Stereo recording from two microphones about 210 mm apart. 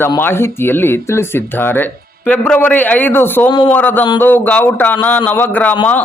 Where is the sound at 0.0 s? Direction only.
10° left (ahead or behind).